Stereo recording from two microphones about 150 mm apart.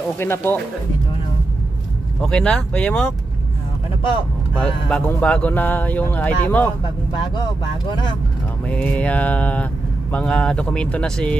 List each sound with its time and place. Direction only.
0.2 s speech: 15° left (ahead or behind)
2.2 s speech: 5° left (ahead or behind)
4.6 s speech: 5° left (ahead or behind)
8.6 s speech: 10° left (ahead or behind)